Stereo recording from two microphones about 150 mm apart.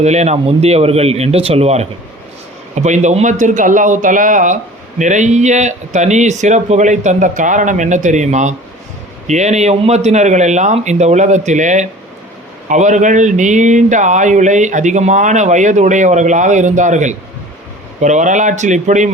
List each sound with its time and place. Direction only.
0.0 s speech: 45° right (ahead or behind)